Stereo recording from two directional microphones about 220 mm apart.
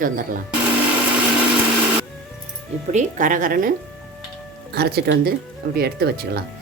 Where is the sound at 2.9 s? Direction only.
35° right (ahead or behind).